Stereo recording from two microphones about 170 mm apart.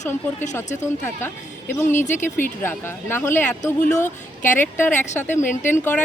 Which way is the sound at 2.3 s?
10° left (ahead or behind).